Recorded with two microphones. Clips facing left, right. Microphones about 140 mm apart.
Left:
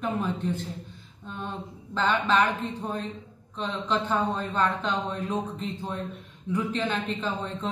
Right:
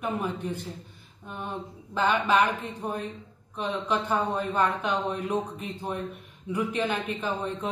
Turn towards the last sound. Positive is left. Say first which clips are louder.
# right 1 dB
turn(degrees=-10)  # may be behind; listen again after turning